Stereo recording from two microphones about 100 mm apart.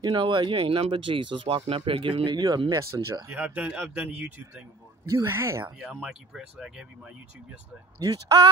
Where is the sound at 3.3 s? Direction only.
15° right (ahead or behind).